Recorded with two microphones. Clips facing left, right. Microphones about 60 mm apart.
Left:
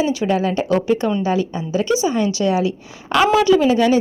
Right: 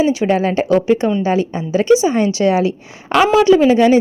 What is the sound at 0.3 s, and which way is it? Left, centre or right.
Speech, right.